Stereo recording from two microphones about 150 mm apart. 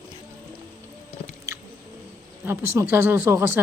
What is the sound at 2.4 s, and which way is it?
Speech, 15° right (ahead or behind).